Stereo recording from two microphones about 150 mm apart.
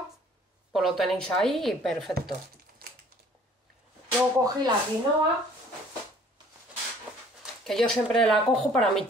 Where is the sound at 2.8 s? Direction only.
90° right.